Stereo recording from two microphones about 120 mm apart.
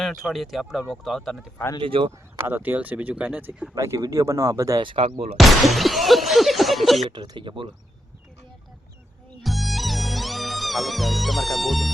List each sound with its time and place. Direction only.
0.0 s speech: centre (ahead or behind)
1.8 s speech: 45° right (ahead or behind)
2.3 s speech: 20° right (ahead or behind)
4.8 s speech: 45° right (ahead or behind)
5.4 s speech: centre (ahead or behind)
7.1 s speech: 40° right (ahead or behind)
9.4 s music: centre (ahead or behind)